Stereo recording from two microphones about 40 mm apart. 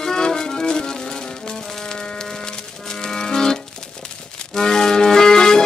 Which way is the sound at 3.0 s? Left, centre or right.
Centre.